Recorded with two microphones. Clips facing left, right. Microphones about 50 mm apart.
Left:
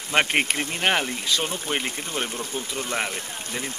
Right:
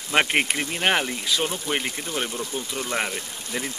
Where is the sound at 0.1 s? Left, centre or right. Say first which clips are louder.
Even; centre.